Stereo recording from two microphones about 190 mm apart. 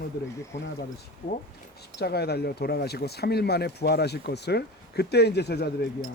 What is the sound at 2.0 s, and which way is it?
Speech, 60° left (ahead or behind).